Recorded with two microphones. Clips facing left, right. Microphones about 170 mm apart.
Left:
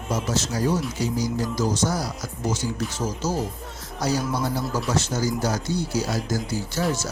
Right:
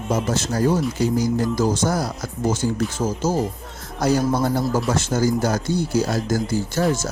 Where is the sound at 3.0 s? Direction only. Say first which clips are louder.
Right 4 dB; 40° right (ahead or behind).